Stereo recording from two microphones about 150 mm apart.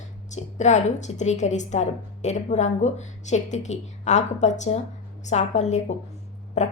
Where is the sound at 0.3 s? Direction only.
50° left (ahead or behind).